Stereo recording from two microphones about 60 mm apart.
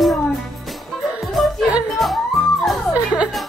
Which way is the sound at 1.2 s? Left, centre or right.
Centre.